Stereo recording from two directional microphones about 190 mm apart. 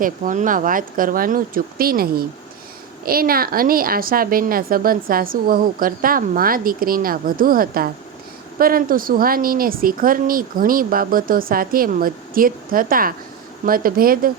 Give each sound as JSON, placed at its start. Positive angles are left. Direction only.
{"t": 0.0, "sound": "a woman's voice", "side_deg": -45}